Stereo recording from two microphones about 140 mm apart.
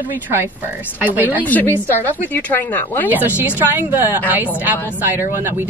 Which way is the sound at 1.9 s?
15° left (ahead or behind).